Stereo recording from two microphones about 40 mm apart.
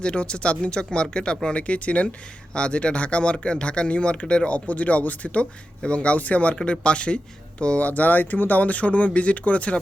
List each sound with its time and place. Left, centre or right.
0.0 s speech: left